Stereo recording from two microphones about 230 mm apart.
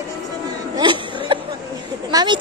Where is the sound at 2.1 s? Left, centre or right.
Centre.